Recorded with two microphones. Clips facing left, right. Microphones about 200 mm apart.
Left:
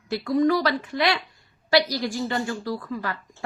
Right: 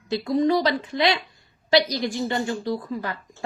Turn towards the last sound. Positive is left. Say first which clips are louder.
# right 2 dB
turn(degrees=-20)  # may be behind; listen again after turning